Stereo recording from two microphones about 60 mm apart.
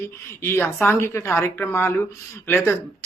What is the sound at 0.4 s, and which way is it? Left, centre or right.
A man's voice, left.